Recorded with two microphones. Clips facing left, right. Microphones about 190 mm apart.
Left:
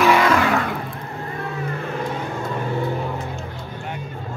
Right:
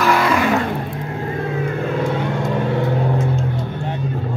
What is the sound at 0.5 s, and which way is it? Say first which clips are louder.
Vehicle: right 3 dB; 20° right (ahead or behind).